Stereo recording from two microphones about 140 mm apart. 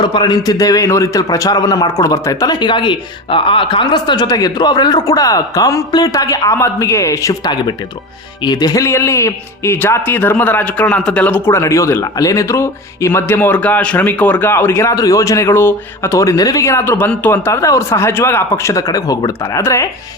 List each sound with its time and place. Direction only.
0.0 s a man's voice: 35° left (ahead or behind)